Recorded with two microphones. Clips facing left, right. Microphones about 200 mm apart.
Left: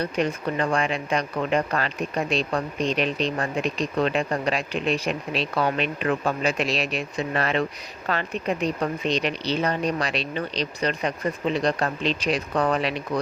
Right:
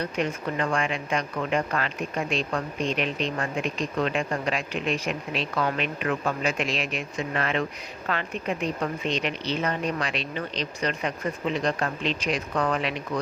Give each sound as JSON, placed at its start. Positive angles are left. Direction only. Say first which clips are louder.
{"t": 0.0, "sound": "speech", "louder": "left 3 dB", "side_deg": 35}